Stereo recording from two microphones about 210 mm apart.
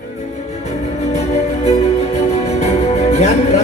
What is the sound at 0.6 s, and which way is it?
Music, 30° left (ahead or behind).